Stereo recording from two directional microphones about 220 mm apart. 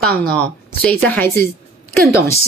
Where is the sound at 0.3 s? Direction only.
5° left (ahead or behind).